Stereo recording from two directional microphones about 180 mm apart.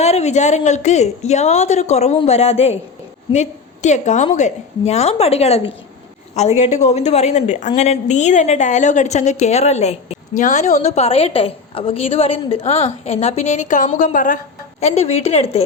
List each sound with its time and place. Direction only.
0.0 s a woman's voice: 40° left (ahead or behind)
14.8 s a woman's voice: 35° left (ahead or behind)